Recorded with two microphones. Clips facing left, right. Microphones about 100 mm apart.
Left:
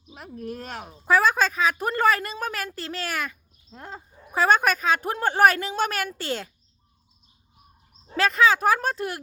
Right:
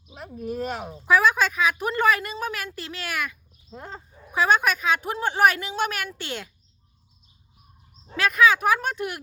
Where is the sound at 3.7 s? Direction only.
5° right (ahead or behind).